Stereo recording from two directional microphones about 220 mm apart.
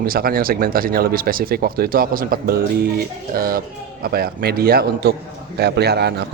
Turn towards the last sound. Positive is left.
turn(degrees=-50)  # may be behind; listen again after turning